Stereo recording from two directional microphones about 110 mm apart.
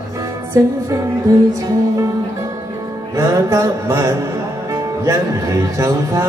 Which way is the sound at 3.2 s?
30° right (ahead or behind).